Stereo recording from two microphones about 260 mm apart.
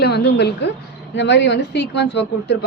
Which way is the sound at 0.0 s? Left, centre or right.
Left.